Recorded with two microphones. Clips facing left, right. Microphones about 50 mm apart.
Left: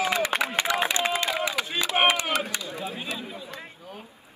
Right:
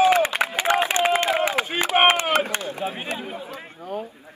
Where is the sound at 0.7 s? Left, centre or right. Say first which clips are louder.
Right 8 dB; right.